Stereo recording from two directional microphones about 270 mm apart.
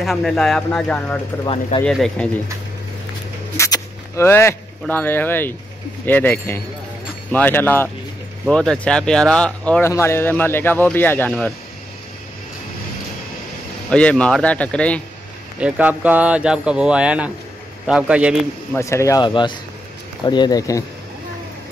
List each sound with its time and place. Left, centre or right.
0.0 s speech: centre
1.4 s speech: left
1.9 s speech: centre
3.5 s speech: centre
13.8 s speech: centre
18.8 s speech: centre